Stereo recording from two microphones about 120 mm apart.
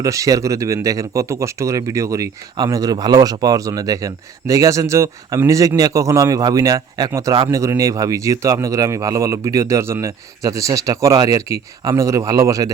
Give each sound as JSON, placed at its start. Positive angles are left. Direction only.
{"t": 0.0, "sound": "speech", "side_deg": -30}